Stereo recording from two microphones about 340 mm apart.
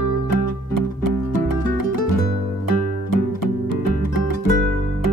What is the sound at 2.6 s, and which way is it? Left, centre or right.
Music, left.